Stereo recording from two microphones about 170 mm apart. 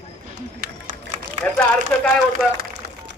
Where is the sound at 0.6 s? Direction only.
50° right (ahead or behind).